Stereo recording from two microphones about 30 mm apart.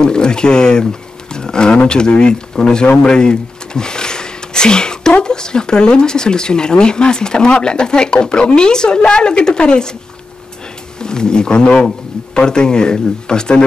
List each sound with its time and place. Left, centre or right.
0.0 s speech: left
11.0 s speech: left